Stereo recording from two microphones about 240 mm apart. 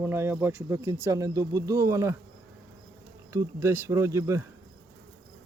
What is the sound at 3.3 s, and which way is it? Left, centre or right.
Speech, centre.